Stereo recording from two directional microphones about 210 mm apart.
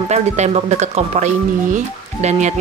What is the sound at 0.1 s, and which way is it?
Speech, 30° right (ahead or behind).